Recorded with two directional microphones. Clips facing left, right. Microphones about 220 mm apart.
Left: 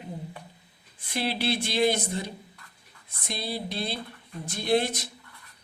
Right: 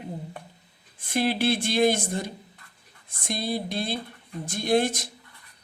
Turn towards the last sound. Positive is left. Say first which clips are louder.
# right 2 dB
turn(degrees=-50)  # may be behind; listen again after turning